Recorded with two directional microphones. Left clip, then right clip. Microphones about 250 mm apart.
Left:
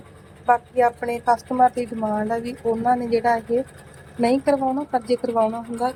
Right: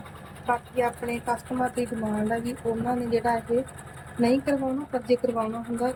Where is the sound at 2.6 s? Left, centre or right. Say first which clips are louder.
Left 8 dB; left.